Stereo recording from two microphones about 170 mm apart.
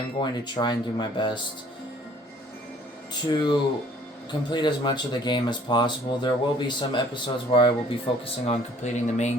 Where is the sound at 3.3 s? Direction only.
25° left (ahead or behind).